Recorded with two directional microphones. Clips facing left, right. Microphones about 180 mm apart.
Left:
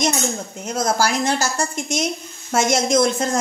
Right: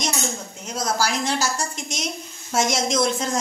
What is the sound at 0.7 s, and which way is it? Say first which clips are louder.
Speech: left 4 dB; 50° left (ahead or behind).